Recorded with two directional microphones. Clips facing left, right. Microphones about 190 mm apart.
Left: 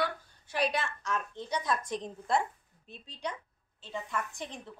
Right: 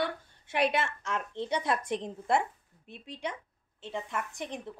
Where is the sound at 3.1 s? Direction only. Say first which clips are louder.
Right 1 dB; 20° right (ahead or behind).